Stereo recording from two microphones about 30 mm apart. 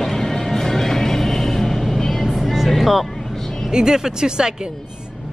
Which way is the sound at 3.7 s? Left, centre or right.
Right.